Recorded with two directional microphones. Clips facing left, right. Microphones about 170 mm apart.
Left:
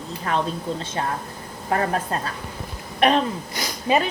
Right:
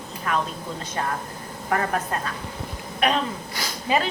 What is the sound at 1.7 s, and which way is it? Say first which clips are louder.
Speech: left 2 dB; 30° left (ahead or behind).